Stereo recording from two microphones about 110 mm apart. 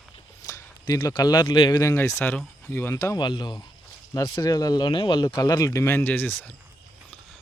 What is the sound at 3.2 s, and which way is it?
Speech, 40° left (ahead or behind).